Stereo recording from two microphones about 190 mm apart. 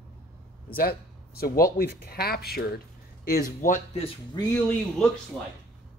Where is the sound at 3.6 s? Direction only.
40° left (ahead or behind).